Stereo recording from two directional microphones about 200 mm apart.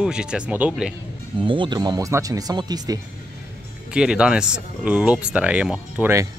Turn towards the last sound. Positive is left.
turn(degrees=-10)  # may be behind; listen again after turning